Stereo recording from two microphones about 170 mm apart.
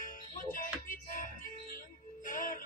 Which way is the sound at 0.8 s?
55° left (ahead or behind).